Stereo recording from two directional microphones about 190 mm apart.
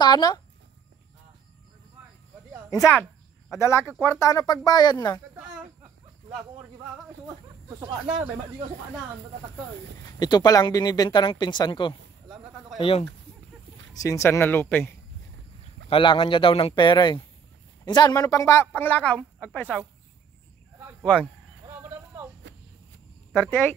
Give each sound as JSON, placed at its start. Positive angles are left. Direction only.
{"t": 0.0, "sound": "speech", "side_deg": 20}
{"t": 3.5, "sound": "speech", "side_deg": 15}
{"t": 10.1, "sound": "speech", "side_deg": 20}
{"t": 13.9, "sound": "speech", "side_deg": 15}
{"t": 15.9, "sound": "speech", "side_deg": 25}
{"t": 21.0, "sound": "speech", "side_deg": 5}
{"t": 21.6, "sound": "a sound", "side_deg": -10}
{"t": 23.3, "sound": "speech", "side_deg": 10}